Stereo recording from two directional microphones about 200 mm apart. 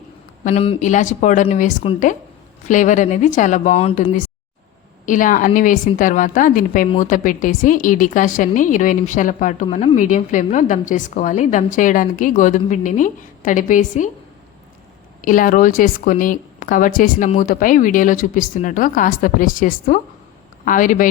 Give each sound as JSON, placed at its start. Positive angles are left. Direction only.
{"t": 0.4, "sound": "a woman's voice", "side_deg": 30}
{"t": 15.2, "sound": "a woman's voice", "side_deg": 40}